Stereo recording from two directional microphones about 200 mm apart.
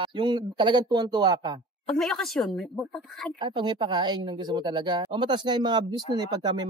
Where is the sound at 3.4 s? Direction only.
25° right (ahead or behind).